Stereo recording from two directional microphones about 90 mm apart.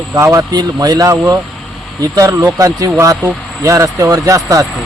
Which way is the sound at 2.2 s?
30° right (ahead or behind).